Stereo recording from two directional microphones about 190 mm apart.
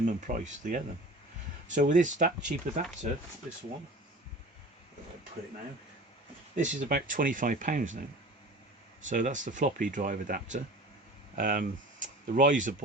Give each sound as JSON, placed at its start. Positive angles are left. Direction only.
{"t": 0.0, "sound": "speech", "side_deg": -45}
{"t": 6.6, "sound": "speech", "side_deg": -45}
{"t": 9.0, "sound": "speech", "side_deg": -40}